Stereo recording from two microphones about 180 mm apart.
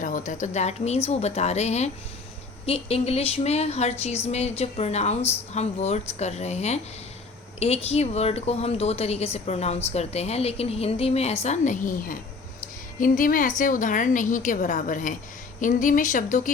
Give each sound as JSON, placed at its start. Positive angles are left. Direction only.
{"t": 0.0, "sound": "a woman's voice", "side_deg": 45}